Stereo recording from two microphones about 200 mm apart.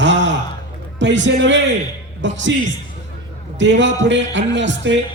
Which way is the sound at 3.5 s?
65° right (ahead or behind).